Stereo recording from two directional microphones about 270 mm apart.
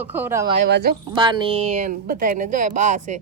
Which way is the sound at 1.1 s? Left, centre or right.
Centre.